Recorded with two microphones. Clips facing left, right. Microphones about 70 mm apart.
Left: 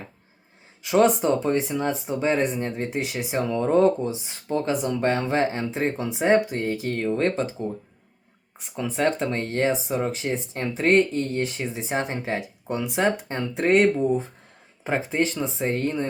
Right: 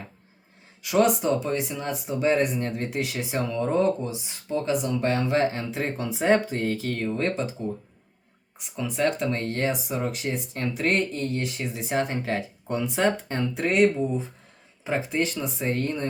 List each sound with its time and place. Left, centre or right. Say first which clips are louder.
0.8 s speech: left 2 dB; left
7.2 s speech: left 3 dB; left
8.5 s speech: left 2 dB; left; by 13.4 s centre
13.7 s speech: left 3 dB; left
14.8 s speech: left 2 dB; left